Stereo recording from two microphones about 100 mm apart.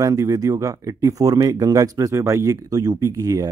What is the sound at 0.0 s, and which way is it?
Speech, 35° right (ahead or behind).